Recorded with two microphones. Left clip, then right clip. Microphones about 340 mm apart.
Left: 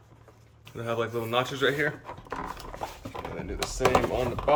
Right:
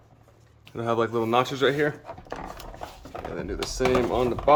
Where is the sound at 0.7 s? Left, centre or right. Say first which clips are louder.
Right 5 dB; centre.